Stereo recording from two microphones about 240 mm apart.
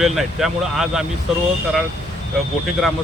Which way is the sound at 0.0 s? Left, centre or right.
Centre.